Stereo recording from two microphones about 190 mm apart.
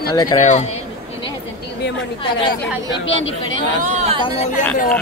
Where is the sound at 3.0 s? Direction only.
85° left.